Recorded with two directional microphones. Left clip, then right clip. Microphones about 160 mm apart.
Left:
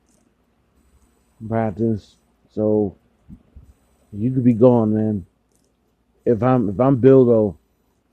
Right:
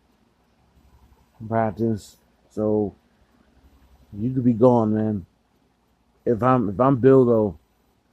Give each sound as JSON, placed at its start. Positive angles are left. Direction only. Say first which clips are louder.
{"t": 1.5, "sound": "speech", "louder": "left 1 dB", "side_deg": 20}
{"t": 4.2, "sound": "speech", "louder": "left 3 dB", "side_deg": 25}
{"t": 6.2, "sound": "speech", "louder": "left 2 dB", "side_deg": 25}
{"t": 6.6, "sound": "a man's voice", "louder": "left 2 dB", "side_deg": 15}